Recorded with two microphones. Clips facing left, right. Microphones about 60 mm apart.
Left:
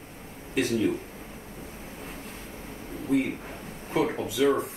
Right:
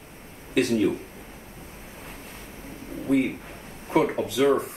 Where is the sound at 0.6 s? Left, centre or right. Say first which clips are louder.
Right 3 dB; right.